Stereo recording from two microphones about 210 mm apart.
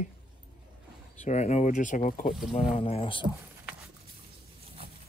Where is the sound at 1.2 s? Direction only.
35° left (ahead or behind).